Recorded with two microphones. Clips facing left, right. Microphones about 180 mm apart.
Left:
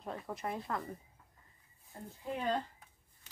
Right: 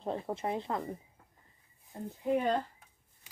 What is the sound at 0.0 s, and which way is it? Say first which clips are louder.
Speech: right 6 dB; 30° right (ahead or behind).